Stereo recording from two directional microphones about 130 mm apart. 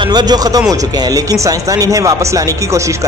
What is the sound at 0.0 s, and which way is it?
Speech, 35° right (ahead or behind).